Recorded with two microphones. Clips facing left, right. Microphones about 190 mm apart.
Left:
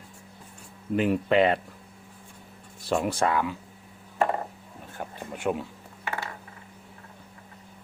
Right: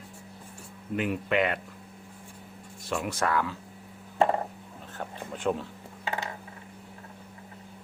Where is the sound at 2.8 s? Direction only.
35° left (ahead or behind).